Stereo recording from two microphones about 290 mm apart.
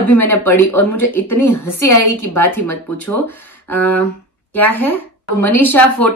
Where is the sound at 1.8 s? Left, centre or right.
Left.